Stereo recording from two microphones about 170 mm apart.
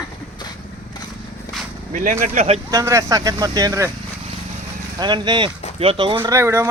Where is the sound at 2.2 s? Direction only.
45° right (ahead or behind).